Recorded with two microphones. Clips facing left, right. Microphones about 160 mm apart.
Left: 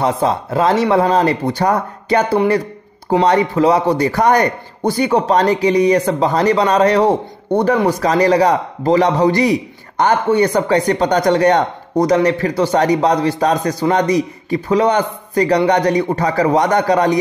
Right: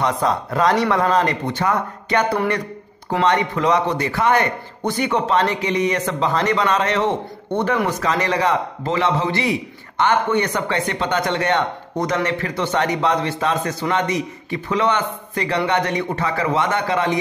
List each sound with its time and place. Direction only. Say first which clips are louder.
0.0 s a man's voice: left 4 dB; 30° left (ahead or behind)